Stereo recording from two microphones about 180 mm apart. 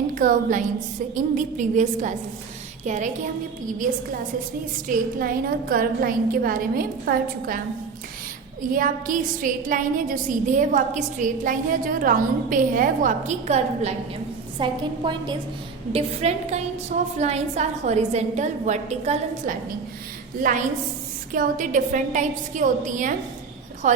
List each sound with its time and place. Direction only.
0.1 s a woman's voice: 45° right (ahead or behind)
4.9 s a woman's voice: 50° right (ahead or behind)
8.7 s a woman's voice: 50° right (ahead or behind)
14.6 s a woman's voice: 25° right (ahead or behind)
21.3 s a woman's voice: 50° right (ahead or behind)